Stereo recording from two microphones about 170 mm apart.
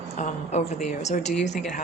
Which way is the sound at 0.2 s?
45° left (ahead or behind).